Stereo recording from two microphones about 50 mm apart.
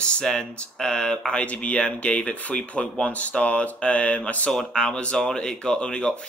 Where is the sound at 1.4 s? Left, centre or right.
Left.